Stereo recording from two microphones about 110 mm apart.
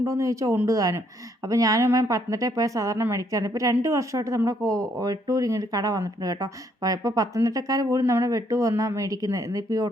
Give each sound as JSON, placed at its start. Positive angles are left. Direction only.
{"t": 0.0, "sound": "a woman's voice", "side_deg": -30}